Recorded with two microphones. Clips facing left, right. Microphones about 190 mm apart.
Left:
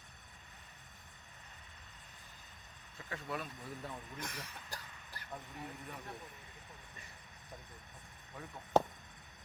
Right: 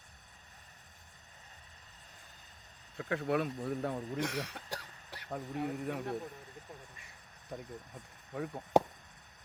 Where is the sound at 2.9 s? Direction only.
60° right (ahead or behind).